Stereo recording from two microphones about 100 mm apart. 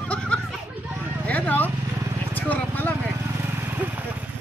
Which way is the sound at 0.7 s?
20° right (ahead or behind).